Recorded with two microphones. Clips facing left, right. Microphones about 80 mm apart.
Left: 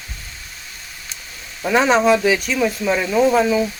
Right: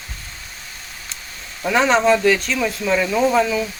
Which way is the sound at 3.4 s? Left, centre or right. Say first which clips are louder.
Left 2 dB; centre.